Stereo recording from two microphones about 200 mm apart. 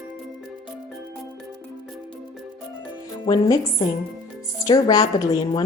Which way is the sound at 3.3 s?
20° left (ahead or behind).